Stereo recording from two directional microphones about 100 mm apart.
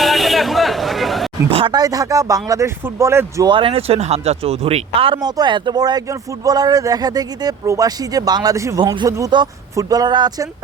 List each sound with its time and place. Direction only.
0.0 s a sound: centre (ahead or behind)
1.5 s speech: 75° right (ahead or behind)
1.7 s speech: 35° right (ahead or behind)
3.4 s speech: 55° right (ahead or behind)
5.2 s speech: 45° right (ahead or behind)